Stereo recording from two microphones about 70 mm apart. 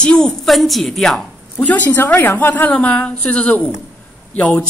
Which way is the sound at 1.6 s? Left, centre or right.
Left.